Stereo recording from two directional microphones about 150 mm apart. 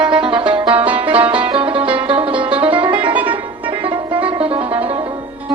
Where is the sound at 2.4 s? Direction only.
10° right (ahead or behind).